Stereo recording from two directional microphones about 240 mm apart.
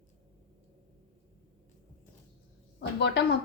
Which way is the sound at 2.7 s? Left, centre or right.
Left.